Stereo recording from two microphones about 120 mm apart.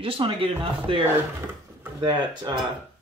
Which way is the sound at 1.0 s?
20° right (ahead or behind).